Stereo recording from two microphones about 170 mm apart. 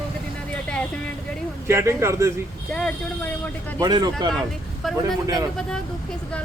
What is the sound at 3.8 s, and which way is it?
Speech, 25° right (ahead or behind).